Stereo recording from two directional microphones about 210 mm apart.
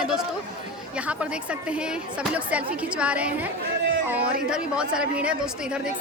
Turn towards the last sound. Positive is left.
turn(degrees=-5)  # may be behind; listen again after turning